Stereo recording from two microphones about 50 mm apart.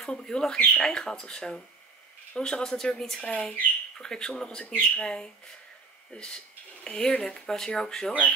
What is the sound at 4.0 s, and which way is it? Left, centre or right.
Speech, centre.